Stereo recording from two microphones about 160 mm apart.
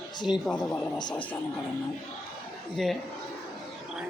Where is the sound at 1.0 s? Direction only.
25° left (ahead or behind).